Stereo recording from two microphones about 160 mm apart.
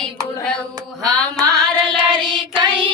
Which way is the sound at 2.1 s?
30° right (ahead or behind).